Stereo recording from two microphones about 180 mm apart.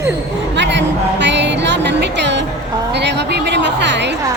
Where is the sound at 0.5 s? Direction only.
75° right (ahead or behind).